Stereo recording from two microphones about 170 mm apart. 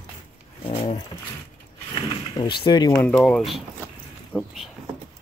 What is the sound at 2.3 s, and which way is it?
Speech, 30° left (ahead or behind).